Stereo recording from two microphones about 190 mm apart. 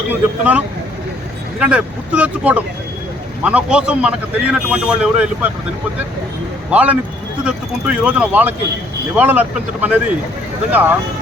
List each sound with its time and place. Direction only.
0.1 s speech: 10° right (ahead or behind)
6.7 s speech: 5° right (ahead or behind)